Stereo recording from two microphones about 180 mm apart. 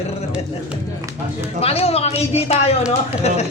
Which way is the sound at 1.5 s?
35° left (ahead or behind).